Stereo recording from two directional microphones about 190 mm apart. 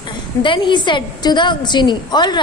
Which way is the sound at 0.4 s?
25° left (ahead or behind).